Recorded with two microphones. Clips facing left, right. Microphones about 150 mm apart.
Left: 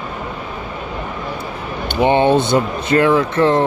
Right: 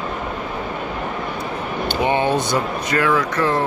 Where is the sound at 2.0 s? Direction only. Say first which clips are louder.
Left 7 dB; 30° left (ahead or behind).